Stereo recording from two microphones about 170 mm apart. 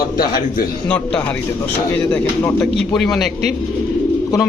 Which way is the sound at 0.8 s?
5° left (ahead or behind).